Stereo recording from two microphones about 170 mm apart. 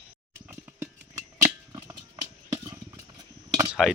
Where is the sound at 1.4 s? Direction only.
20° right (ahead or behind).